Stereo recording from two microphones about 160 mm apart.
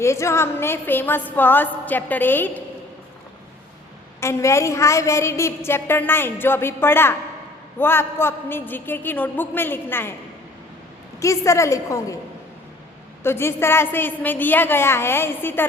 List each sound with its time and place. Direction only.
0.0 s a woman's voice: 15° left (ahead or behind)
4.2 s a woman's voice: 15° left (ahead or behind)
11.2 s a woman's voice: 20° left (ahead or behind)
13.2 s a woman's voice: 15° left (ahead or behind)